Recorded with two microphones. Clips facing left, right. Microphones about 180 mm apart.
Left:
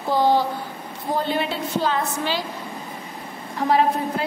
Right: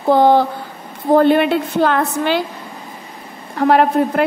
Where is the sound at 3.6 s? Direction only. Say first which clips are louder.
Right 7 dB; 65° right (ahead or behind).